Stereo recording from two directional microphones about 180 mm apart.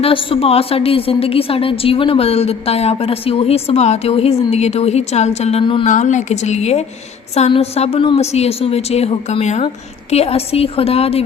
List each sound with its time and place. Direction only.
0.0 s a woman's voice: 30° left (ahead or behind)
5.8 s a woman's voice: 40° left (ahead or behind)